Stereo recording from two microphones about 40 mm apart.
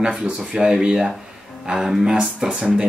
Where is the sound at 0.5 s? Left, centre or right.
Centre.